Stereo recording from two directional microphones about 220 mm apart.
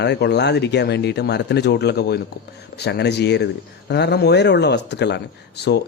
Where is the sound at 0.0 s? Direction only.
50° left (ahead or behind).